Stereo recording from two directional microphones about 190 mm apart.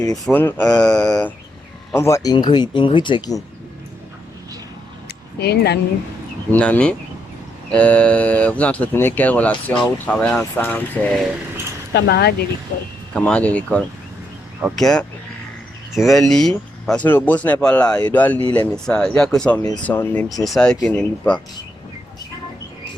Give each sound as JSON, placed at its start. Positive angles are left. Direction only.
{"t": 0.0, "sound": "speech", "side_deg": 15}
{"t": 2.0, "sound": "speech", "side_deg": 15}
{"t": 5.0, "sound": "a sound", "side_deg": 60}
{"t": 6.5, "sound": "speech", "side_deg": 5}
{"t": 11.9, "sound": "speech", "side_deg": 60}
{"t": 13.1, "sound": "speech", "side_deg": 5}
{"t": 16.0, "sound": "speech", "side_deg": 0}